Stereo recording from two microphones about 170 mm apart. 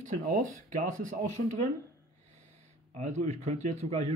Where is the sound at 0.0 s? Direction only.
50° right (ahead or behind).